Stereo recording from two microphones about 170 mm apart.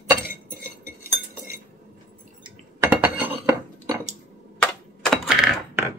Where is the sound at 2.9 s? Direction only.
10° right (ahead or behind).